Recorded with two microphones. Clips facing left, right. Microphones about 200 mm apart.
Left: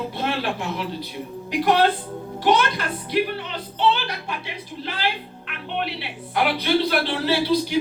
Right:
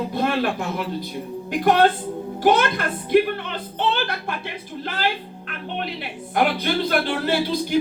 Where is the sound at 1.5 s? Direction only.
50° right (ahead or behind).